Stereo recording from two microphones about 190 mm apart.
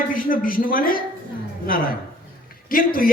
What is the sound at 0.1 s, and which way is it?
A man's voice, 45° left (ahead or behind).